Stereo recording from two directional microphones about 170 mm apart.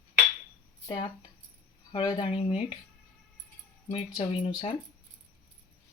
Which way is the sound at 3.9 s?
35° left (ahead or behind).